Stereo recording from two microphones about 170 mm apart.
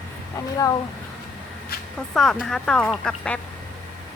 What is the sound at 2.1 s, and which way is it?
Speech, centre (ahead or behind).